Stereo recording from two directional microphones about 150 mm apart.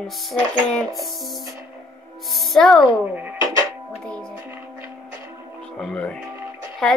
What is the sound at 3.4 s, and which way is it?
Music, 20° right (ahead or behind).